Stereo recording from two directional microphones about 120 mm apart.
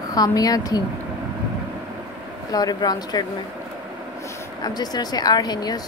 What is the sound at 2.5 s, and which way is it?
Speech, 35° left (ahead or behind).